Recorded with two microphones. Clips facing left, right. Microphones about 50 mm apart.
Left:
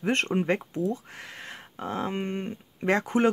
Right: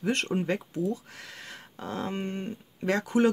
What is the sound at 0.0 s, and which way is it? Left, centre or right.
Speech, left.